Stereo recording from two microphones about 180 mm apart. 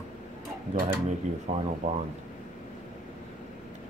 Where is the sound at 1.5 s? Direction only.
35° right (ahead or behind).